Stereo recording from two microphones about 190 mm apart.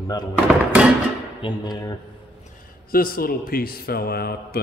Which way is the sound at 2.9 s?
50° left (ahead or behind).